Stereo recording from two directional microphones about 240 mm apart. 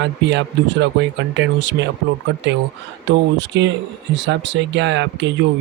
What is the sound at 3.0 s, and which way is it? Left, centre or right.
Speech, right.